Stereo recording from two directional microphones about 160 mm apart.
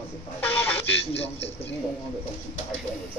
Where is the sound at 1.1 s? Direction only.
40° left (ahead or behind).